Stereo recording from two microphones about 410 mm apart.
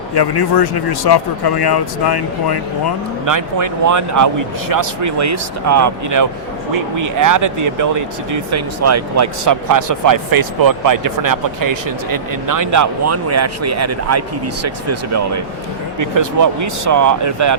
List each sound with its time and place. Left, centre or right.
0.1 s speech: left
3.2 s speech: right